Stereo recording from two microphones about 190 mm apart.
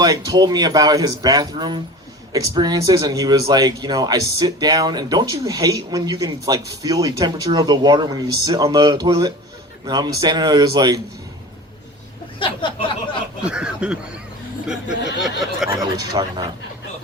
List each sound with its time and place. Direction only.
0.0 s speech: 20° right (ahead or behind)
12.4 s speech: 25° left (ahead or behind)
13.4 s speech: 5° right (ahead or behind)
15.2 s speech: centre (ahead or behind)
15.8 s speech: 20° right (ahead or behind)